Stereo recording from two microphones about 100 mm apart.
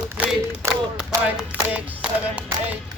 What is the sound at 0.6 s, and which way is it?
Speech, 25° right (ahead or behind).